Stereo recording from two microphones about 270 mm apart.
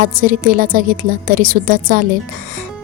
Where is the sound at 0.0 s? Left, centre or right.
Right.